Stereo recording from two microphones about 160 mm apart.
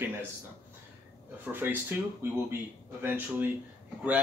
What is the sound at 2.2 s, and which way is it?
Speech, 15° right (ahead or behind).